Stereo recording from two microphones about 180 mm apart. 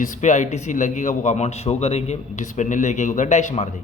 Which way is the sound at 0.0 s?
45° left (ahead or behind).